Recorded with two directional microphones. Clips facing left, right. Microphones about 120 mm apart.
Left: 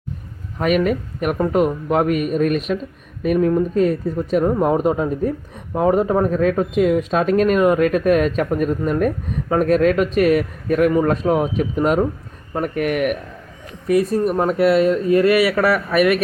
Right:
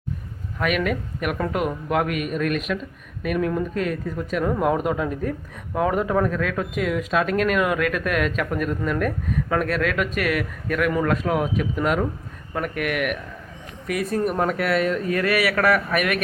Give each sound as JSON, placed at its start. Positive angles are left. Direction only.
{"t": 0.6, "sound": "speech", "side_deg": 35}
{"t": 13.8, "sound": "speech", "side_deg": 25}